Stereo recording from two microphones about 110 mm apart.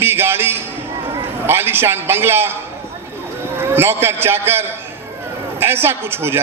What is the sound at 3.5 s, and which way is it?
A man's voice, 20° right (ahead or behind).